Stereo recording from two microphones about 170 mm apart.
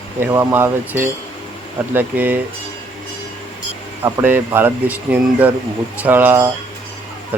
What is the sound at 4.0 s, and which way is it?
Speech, 15° right (ahead or behind).